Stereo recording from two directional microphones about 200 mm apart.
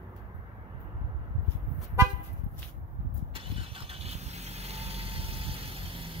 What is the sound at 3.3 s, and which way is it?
Vehicle, 30° right (ahead or behind).